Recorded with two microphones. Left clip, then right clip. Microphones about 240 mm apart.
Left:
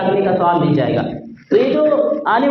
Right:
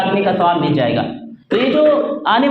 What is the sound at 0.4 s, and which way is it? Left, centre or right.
A woman's voice, right.